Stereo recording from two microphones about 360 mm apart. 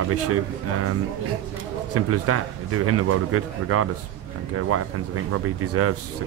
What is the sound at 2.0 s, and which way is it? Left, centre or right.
Speech, right.